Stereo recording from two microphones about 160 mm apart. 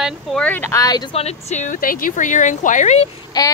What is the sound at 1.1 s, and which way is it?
Speech, 45° left (ahead or behind).